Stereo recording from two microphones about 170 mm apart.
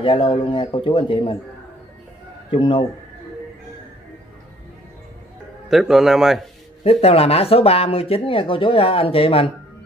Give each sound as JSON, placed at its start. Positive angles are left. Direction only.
{"t": 0.0, "sound": "speech", "side_deg": 30}
{"t": 2.5, "sound": "a man's voice", "side_deg": 30}
{"t": 5.7, "sound": "a man's voice", "side_deg": 0}
{"t": 6.8, "sound": "speech", "side_deg": 35}